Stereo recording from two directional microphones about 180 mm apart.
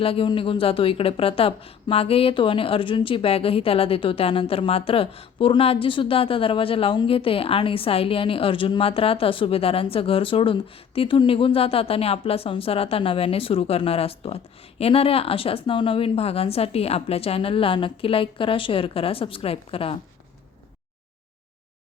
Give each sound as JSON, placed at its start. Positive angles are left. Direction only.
{"t": 0.0, "sound": "a woman's voice", "side_deg": 30}